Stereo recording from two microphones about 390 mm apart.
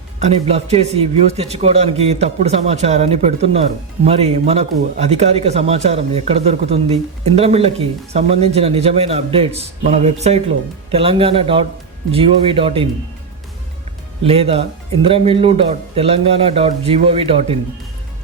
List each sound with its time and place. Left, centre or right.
0.2 s speech: centre
14.3 s speech: centre